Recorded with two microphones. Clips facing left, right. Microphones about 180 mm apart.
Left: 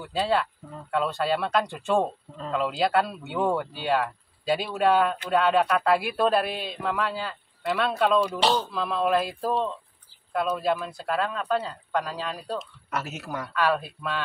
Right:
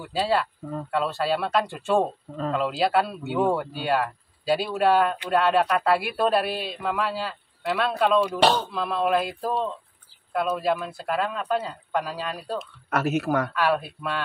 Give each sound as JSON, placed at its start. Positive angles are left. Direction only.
{"t": 0.0, "sound": "speech", "side_deg": 0}
{"t": 12.9, "sound": "speech", "side_deg": -60}
{"t": 13.6, "sound": "speech", "side_deg": 0}